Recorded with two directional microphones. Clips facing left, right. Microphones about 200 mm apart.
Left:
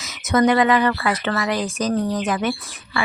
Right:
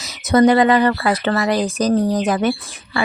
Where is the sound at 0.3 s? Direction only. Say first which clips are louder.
Right 4 dB; 35° right (ahead or behind).